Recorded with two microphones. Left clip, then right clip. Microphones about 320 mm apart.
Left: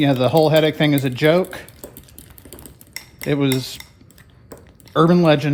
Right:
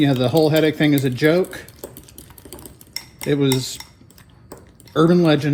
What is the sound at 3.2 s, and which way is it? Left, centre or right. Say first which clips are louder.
Speech: right 1 dB; left.